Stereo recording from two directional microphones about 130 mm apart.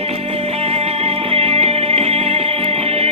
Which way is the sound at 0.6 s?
50° right (ahead or behind).